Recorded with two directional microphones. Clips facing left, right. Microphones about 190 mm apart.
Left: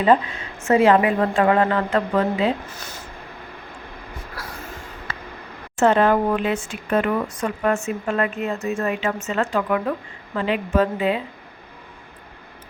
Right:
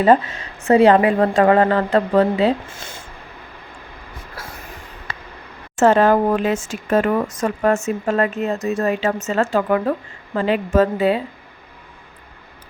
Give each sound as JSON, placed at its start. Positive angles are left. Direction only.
{"t": 0.6, "sound": "speech", "side_deg": -35}
{"t": 5.8, "sound": "speech", "side_deg": -40}